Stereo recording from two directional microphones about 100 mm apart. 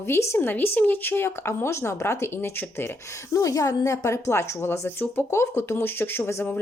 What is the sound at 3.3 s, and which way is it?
A woman's voice, 35° left (ahead or behind).